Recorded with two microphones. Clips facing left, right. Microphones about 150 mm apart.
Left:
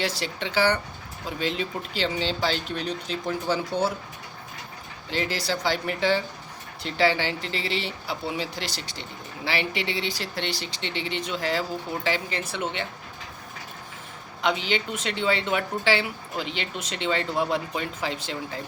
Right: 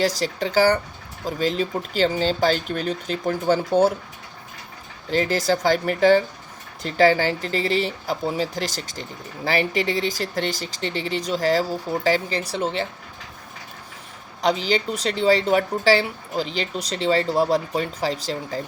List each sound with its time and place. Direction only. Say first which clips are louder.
0.0 s speech: right 7 dB; 40° right (ahead or behind)
5.1 s speech: right 7 dB; 45° right (ahead or behind)
14.4 s speech: right 5 dB; 35° right (ahead or behind)